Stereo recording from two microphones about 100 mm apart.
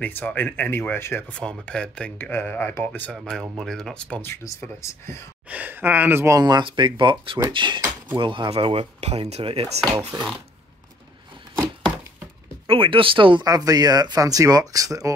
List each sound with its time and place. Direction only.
0.0 s speech: 15° left (ahead or behind)
1.3 s speech: 10° left (ahead or behind)
2.1 s speech: 20° left (ahead or behind)
3.2 s speech: centre (ahead or behind)
4.2 s speech: 25° left (ahead or behind)
5.5 s speech: 15° right (ahead or behind)
6.4 s speech: 45° right (ahead or behind); by 10.0 s 65° right (ahead or behind)
12.6 s speech: 65° right (ahead or behind)
13.4 s speech: 40° right (ahead or behind)